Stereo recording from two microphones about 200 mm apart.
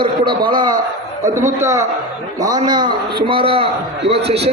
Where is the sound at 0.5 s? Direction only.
20° right (ahead or behind).